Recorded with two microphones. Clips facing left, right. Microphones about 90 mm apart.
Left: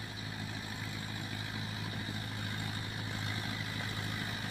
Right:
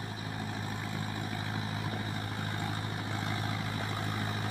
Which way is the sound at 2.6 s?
45° right (ahead or behind).